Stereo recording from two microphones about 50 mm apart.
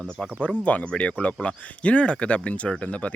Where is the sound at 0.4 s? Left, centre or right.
Left.